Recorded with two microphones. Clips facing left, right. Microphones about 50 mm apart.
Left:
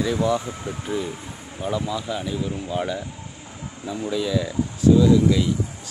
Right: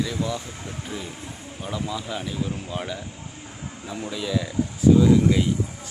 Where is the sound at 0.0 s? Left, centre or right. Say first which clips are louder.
Left 6 dB; centre.